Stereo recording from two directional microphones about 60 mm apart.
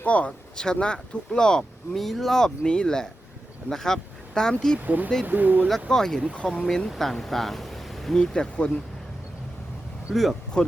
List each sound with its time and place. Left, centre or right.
0.0 s speech: left
0.3 s speech: centre
4.8 s speech: right
5.9 s speech: centre
8.2 s speech: centre
10.1 s speech: centre
10.5 s speech: centre